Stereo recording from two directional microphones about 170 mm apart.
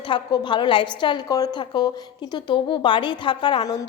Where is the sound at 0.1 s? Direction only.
30° left (ahead or behind).